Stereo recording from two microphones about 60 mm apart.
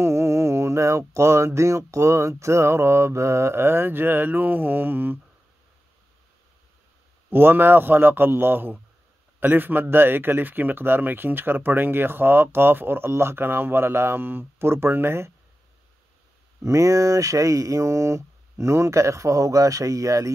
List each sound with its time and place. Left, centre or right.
0.0 s a sound: right
7.2 s a man's voice: right
16.6 s speech: right